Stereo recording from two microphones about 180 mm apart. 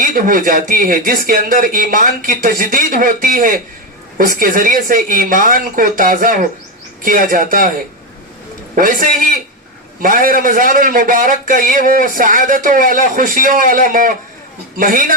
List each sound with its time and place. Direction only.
0.0 s speech: 50° right (ahead or behind)
8.7 s speech: 50° right (ahead or behind)